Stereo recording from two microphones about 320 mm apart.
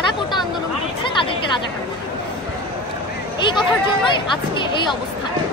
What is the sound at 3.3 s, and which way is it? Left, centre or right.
Speech, centre.